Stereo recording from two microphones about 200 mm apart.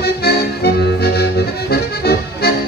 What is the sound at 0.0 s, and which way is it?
Accordion, 50° left (ahead or behind).